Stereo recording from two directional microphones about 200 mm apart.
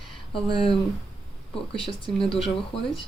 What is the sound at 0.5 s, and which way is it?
Speech, 25° left (ahead or behind).